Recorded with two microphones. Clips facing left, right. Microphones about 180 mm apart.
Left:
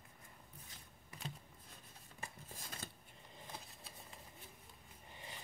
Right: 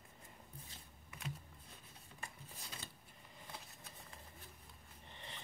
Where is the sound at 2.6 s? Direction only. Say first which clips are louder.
Left 2 dB; 45° left (ahead or behind).